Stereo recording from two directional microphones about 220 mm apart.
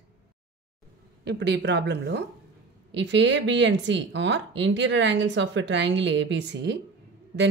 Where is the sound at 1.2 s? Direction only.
50° right (ahead or behind).